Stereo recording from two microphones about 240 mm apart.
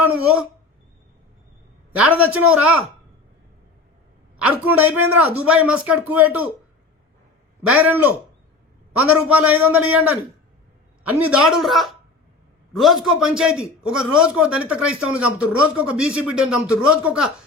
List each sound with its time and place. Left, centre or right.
0.0 s speech: centre
2.0 s speech: centre
4.4 s a woman's voice: centre
7.8 s speech: centre
11.2 s a man's voice: centre